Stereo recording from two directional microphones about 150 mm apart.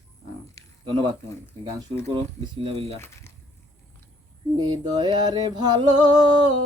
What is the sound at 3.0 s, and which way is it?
Speech, 15° left (ahead or behind).